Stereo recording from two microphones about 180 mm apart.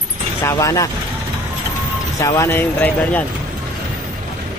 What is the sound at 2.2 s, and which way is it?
Speech, 15° left (ahead or behind).